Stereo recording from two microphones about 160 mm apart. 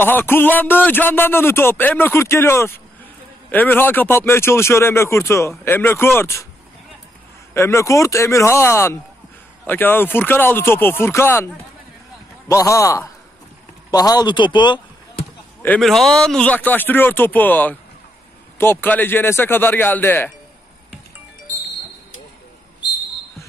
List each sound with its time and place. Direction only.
0.0 s speech: 15° left (ahead or behind)
7.5 s a man's voice: 20° left (ahead or behind)
15.6 s speech: 5° left (ahead or behind)